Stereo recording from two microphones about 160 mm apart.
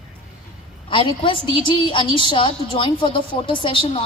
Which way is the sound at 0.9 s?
30° left (ahead or behind).